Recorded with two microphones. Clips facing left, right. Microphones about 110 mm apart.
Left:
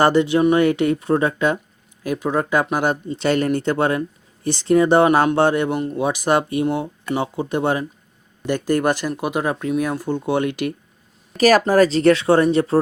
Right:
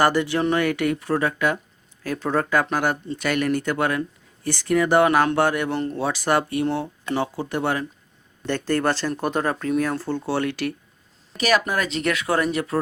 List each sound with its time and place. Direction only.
0.0 s speech: 20° left (ahead or behind)
2.0 s speech: 15° left (ahead or behind)
5.7 s speech: 10° left (ahead or behind)
11.3 s speech: 40° left (ahead or behind)